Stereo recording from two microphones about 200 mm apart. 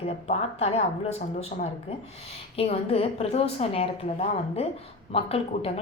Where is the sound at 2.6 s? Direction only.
30° left (ahead or behind).